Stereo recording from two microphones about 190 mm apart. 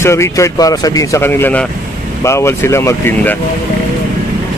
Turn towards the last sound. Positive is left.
turn(degrees=10)  # may be behind; listen again after turning